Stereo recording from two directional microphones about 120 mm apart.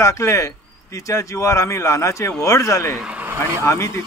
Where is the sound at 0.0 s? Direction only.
25° left (ahead or behind).